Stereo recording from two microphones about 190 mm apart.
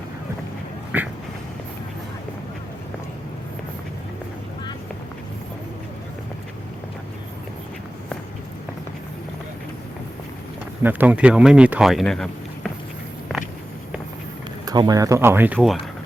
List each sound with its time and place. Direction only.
0.9 s a sound: 10° right (ahead or behind)
10.8 s speech: 10° right (ahead or behind)
14.6 s speech: 20° right (ahead or behind)
15.5 s speech: centre (ahead or behind)